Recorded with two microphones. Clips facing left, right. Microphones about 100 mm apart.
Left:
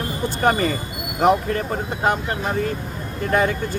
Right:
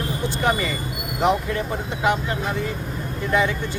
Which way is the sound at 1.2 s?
45° left (ahead or behind).